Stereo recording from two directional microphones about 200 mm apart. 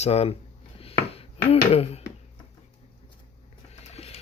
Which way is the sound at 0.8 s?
30° left (ahead or behind).